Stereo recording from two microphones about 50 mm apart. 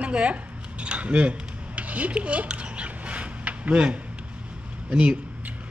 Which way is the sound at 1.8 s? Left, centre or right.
Right.